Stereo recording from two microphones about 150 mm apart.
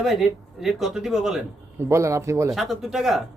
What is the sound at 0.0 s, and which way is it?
A man's voice, centre (ahead or behind).